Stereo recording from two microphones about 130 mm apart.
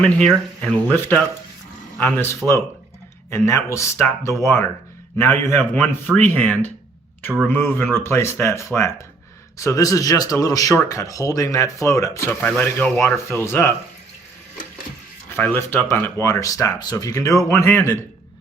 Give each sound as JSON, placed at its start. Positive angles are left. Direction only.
{"t": 0.0, "sound": "speech", "side_deg": 5}
{"t": 12.4, "sound": "speech", "side_deg": 10}
{"t": 15.3, "sound": "speech", "side_deg": 15}